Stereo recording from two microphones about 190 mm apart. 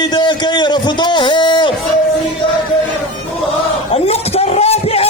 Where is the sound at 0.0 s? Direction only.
20° left (ahead or behind).